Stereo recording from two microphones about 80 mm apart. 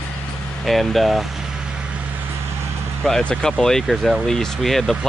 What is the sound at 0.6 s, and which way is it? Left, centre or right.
Vehicle, centre.